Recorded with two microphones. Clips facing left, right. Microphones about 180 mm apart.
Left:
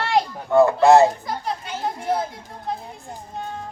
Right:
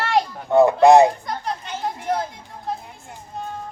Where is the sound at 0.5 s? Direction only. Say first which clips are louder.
Right 1 dB; 15° right (ahead or behind).